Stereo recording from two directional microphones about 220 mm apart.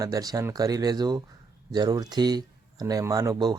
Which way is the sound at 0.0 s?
15° right (ahead or behind).